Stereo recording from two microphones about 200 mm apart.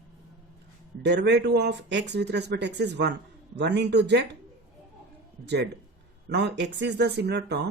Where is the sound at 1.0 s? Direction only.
60° right (ahead or behind).